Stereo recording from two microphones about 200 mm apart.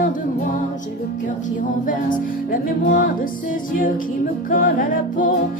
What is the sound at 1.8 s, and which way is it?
A capella, 40° left (ahead or behind).